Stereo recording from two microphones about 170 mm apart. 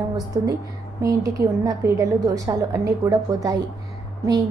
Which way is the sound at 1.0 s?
20° right (ahead or behind).